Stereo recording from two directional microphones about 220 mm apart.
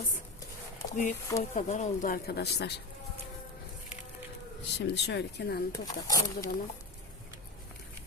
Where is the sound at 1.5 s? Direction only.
30° left (ahead or behind); by 2.7 s 50° left (ahead or behind).